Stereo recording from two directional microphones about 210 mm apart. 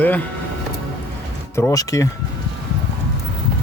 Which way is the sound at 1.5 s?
15° left (ahead or behind).